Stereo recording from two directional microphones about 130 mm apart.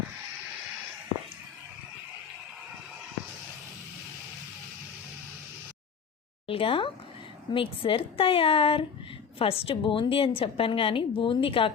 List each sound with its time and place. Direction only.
6.5 s a woman's voice: 45° left (ahead or behind)